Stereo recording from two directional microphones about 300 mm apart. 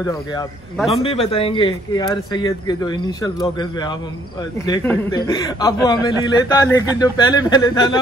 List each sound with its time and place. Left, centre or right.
0.0 s speech: centre